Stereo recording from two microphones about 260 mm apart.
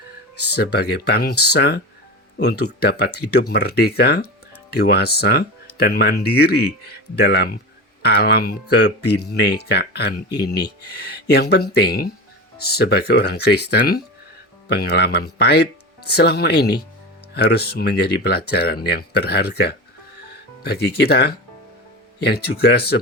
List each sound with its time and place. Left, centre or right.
0.5 s speech: left